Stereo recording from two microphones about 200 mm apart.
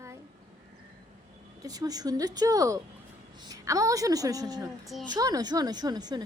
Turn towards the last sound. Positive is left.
turn(degrees=-20)  # may be behind; listen again after turning